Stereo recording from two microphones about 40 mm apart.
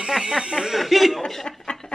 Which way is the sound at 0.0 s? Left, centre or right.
Centre.